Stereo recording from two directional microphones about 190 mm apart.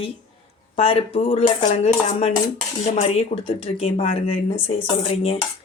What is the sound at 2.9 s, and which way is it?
Speech, 35° left (ahead or behind).